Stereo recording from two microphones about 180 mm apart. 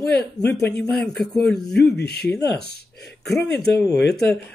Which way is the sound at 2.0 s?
65° left (ahead or behind).